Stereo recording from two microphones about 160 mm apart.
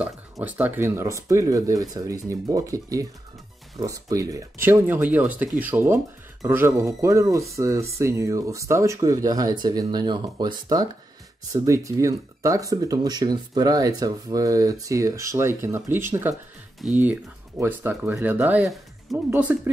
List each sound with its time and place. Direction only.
0.0 s speech: 10° right (ahead or behind)
19.3 s speech: 15° right (ahead or behind)